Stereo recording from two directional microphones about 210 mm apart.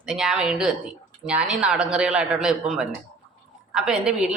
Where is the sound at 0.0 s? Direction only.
5° right (ahead or behind).